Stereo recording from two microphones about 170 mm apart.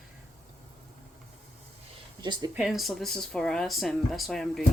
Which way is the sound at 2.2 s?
25° right (ahead or behind).